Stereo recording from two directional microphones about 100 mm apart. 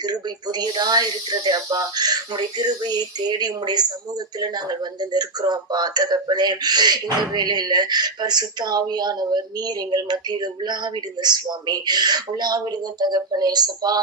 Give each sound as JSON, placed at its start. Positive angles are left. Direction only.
{"t": 0.0, "sound": "speech", "side_deg": -45}